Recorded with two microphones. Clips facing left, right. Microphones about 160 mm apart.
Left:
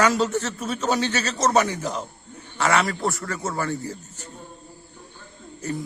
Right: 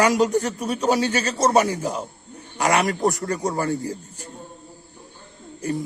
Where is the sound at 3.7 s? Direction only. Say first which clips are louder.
Right 4 dB; 10° right (ahead or behind).